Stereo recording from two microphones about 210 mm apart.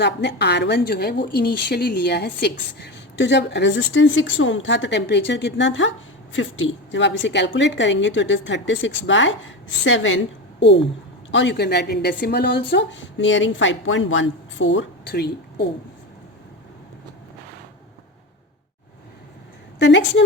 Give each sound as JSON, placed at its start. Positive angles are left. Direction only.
{"t": 0.0, "sound": "a woman's voice", "side_deg": 55}
{"t": 19.8, "sound": "a woman's voice", "side_deg": 55}